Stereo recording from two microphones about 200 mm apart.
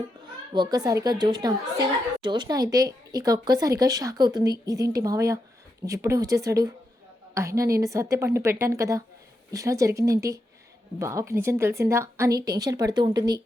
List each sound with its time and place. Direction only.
0.5 s a woman's voice: 20° right (ahead or behind)